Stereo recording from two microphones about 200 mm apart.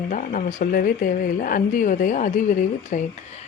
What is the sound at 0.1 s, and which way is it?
A woman's voice, 40° left (ahead or behind).